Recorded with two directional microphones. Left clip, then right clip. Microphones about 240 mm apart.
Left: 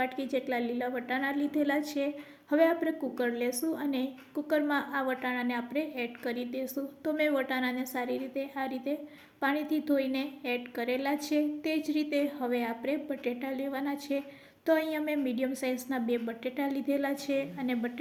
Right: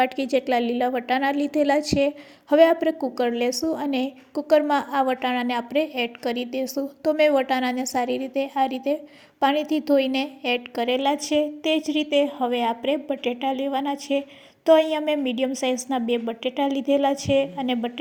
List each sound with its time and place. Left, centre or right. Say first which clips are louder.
0.0 s a woman's voice: right 10 dB; right